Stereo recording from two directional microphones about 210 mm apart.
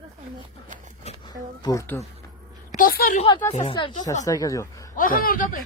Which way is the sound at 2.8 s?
45° left (ahead or behind).